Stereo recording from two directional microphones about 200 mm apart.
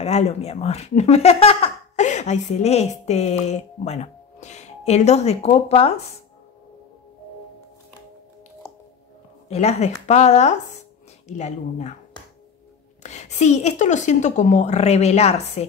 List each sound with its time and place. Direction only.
0.0 s speech: 35° left (ahead or behind)
9.5 s speech: 35° left (ahead or behind)
13.0 s speech: 35° left (ahead or behind)